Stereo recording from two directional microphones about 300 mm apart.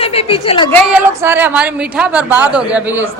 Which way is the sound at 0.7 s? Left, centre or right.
Centre.